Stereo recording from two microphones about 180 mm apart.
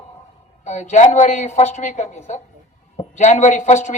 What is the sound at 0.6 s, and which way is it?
A man's voice, 40° left (ahead or behind).